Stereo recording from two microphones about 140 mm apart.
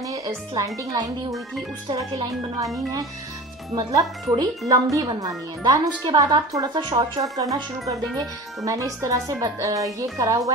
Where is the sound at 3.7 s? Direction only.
25° right (ahead or behind).